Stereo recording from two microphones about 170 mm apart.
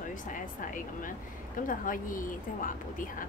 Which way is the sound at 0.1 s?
50° left (ahead or behind).